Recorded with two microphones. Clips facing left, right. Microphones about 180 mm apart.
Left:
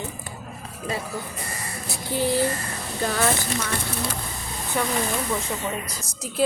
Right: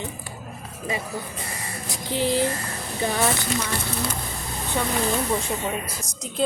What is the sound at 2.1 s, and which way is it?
Speech, 15° right (ahead or behind).